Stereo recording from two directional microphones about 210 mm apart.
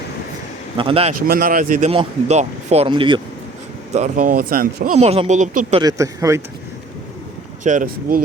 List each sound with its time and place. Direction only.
0.8 s speech: 25° right (ahead or behind)
1.3 s speech: 45° right (ahead or behind)
1.9 s speech: 30° right (ahead or behind)
3.9 s speech: 35° right (ahead or behind)
5.8 s speech: 15° right (ahead or behind)
7.6 s speech: 35° right (ahead or behind)